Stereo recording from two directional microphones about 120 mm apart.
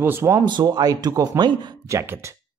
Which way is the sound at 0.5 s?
35° right (ahead or behind).